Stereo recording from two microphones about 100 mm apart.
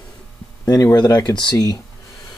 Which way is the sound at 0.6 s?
35° left (ahead or behind).